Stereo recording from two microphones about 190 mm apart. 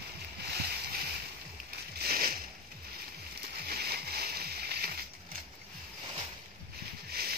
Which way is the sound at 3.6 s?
55° right (ahead or behind).